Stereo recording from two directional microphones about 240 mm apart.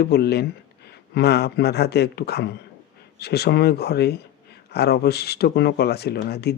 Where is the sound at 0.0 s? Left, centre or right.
Left.